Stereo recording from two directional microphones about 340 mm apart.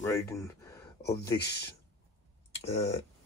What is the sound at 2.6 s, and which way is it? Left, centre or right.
Speech, centre.